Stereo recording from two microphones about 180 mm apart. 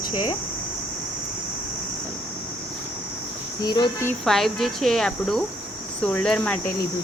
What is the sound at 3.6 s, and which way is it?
Speech, 25° left (ahead or behind).